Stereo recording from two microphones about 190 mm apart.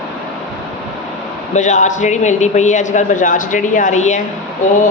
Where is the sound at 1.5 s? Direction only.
40° left (ahead or behind).